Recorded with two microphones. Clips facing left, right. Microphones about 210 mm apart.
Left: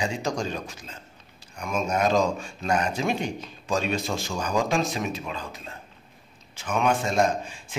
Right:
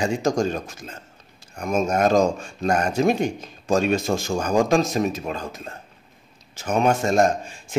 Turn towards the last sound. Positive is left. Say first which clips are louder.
# right 4 dB
turn(degrees=-45)  # may be behind; listen again after turning